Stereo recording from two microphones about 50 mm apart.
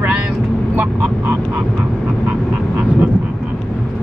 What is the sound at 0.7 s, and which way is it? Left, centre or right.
Fowl, right.